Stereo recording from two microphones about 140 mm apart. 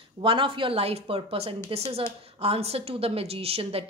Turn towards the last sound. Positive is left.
turn(degrees=-45)  # may be behind; listen again after turning